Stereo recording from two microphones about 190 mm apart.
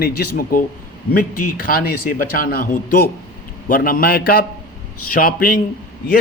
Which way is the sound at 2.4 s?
50° left (ahead or behind).